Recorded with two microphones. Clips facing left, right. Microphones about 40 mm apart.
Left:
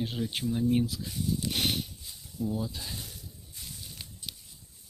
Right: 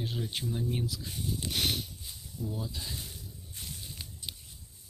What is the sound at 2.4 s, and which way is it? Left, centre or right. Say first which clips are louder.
Speech: left 4 dB; left.